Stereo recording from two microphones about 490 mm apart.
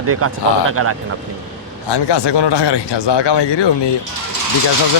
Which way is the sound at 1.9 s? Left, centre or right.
Left.